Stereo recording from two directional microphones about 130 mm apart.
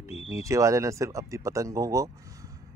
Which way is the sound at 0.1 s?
50° left (ahead or behind).